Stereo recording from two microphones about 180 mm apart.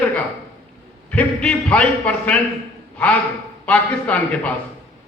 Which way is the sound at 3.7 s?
10° left (ahead or behind).